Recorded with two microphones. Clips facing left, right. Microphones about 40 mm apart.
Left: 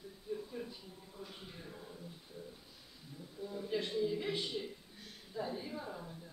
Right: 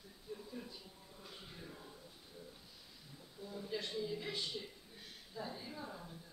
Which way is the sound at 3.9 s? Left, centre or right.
Centre.